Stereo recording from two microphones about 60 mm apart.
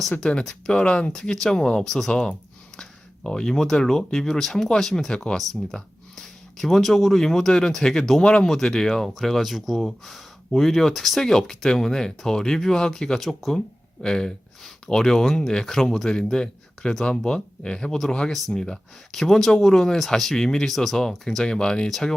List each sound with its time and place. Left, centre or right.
0.2 s speech: centre
1.1 s speech: centre